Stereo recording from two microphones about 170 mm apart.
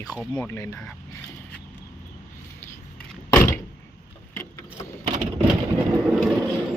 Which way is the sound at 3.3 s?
15° left (ahead or behind).